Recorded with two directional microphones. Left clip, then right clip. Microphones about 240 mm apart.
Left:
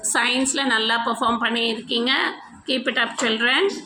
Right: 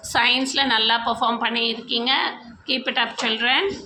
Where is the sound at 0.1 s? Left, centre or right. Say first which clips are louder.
Right 2 dB; centre.